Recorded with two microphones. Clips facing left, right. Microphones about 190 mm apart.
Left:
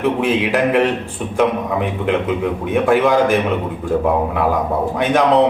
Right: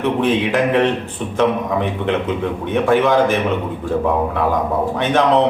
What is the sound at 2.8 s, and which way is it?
Speech, 10° left (ahead or behind).